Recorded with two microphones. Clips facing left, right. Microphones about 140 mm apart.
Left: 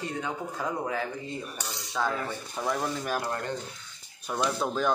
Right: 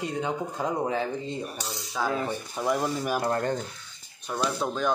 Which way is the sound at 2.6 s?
10° right (ahead or behind).